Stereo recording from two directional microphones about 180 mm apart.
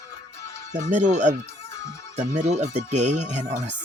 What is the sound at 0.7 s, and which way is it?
Speech, 45° right (ahead or behind).